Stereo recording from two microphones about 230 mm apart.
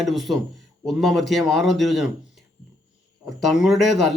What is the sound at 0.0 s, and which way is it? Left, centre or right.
Speech, centre.